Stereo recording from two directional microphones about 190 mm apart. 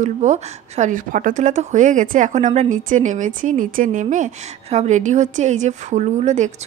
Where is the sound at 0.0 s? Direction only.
40° right (ahead or behind).